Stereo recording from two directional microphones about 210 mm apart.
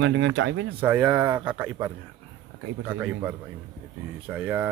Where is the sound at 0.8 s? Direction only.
10° right (ahead or behind).